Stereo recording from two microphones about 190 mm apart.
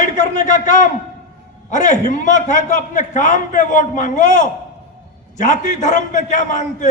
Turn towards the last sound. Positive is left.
turn(degrees=40)  # may be behind; listen again after turning